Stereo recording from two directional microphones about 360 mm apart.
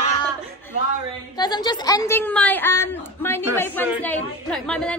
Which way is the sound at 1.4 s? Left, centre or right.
Centre.